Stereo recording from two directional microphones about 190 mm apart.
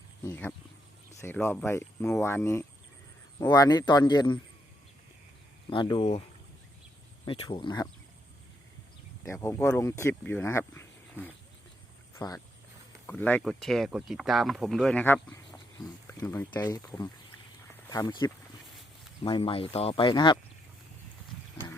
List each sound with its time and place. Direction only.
0.2 s speech: 15° left (ahead or behind)
5.7 s speech: 25° left (ahead or behind)
7.3 s speech: 25° left (ahead or behind)
9.2 s speech: 15° left (ahead or behind)